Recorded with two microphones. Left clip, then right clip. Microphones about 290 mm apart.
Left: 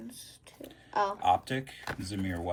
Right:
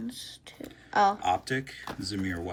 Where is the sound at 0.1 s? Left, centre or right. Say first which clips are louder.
Right 8 dB; right.